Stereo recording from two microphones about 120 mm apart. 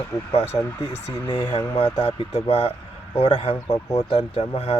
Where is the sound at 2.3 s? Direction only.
55° left (ahead or behind).